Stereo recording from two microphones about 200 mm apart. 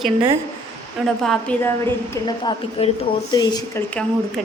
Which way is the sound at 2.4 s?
25° left (ahead or behind).